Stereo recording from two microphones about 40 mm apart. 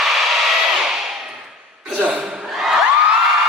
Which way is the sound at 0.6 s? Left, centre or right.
Centre.